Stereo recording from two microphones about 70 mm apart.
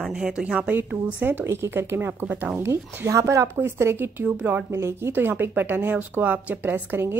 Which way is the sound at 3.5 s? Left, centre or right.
Right.